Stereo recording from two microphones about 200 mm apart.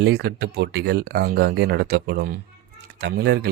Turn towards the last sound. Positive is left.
turn(degrees=-55)  # may be behind; listen again after turning